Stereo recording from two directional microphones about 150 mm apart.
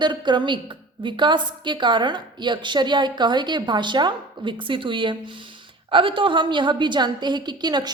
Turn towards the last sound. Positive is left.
turn(degrees=-30)  # may be behind; listen again after turning